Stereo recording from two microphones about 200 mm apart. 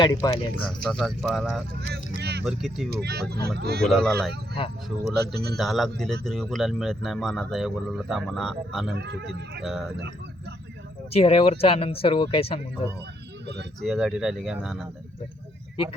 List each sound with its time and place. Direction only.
0.0 s speech: 20° left (ahead or behind)
0.9 s speech: centre (ahead or behind)
1.9 s vehicle: 55° right (ahead or behind)
2.4 s speech: centre (ahead or behind)
2.9 s speech: 55° right (ahead or behind)
3.8 s speech: centre (ahead or behind)
5.1 s speech: 55° right (ahead or behind)
5.5 s speech: centre (ahead or behind)
9.0 s a man's voice: 60° right (ahead or behind)
11.1 s speech: 30° left (ahead or behind)
13.8 s speech: centre (ahead or behind)